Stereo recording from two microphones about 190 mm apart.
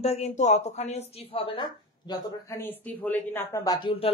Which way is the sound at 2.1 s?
15° left (ahead or behind).